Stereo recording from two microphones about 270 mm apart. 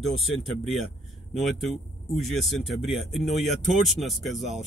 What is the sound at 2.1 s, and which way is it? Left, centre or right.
Speech, centre.